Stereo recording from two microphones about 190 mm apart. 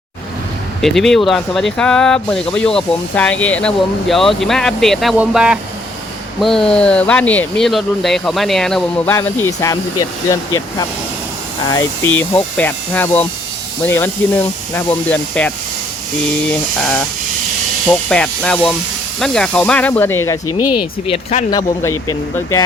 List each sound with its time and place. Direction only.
0.8 s speech: centre (ahead or behind)
9.1 s speech: 15° left (ahead or behind)
20.7 s speech: 30° left (ahead or behind)
21.8 s speech: 15° left (ahead or behind)